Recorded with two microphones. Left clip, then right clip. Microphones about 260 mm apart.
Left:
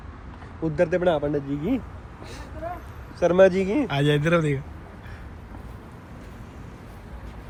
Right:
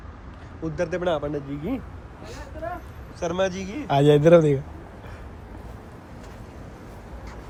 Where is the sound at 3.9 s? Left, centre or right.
Centre.